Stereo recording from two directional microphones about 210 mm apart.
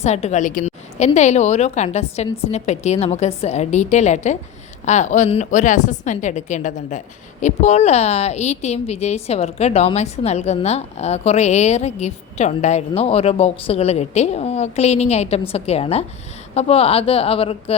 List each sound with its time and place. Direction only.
0.0 s a woman's voice: 30° left (ahead or behind)